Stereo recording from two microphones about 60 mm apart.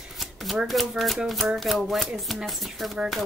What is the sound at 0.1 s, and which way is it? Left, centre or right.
Speech, centre.